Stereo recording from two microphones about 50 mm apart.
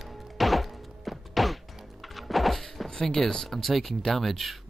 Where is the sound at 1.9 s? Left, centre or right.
Centre.